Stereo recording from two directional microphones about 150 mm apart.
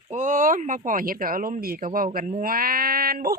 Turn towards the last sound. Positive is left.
turn(degrees=-75)  # may be behind; listen again after turning